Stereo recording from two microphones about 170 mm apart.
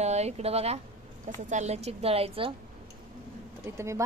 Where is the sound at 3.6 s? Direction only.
15° right (ahead or behind).